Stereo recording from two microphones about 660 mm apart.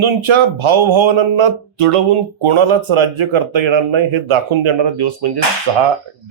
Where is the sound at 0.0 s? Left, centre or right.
Right.